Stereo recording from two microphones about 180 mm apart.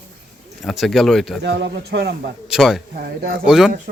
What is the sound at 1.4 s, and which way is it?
Speech, 70° right (ahead or behind).